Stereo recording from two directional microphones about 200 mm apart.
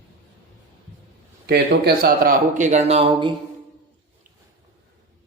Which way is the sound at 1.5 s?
55° right (ahead or behind).